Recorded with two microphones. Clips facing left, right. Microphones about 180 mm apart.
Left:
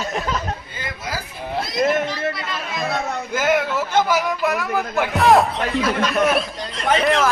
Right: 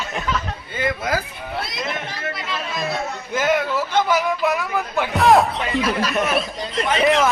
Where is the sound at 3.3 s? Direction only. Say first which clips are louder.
Even; 5° left (ahead or behind).